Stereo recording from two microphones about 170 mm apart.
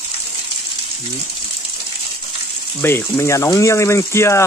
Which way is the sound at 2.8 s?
15° left (ahead or behind).